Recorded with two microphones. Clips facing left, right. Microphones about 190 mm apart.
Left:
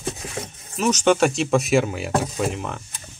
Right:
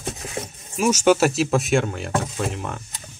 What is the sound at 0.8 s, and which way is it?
Speech, 10° right (ahead or behind).